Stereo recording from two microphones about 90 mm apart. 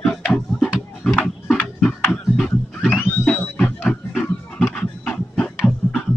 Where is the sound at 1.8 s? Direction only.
10° left (ahead or behind).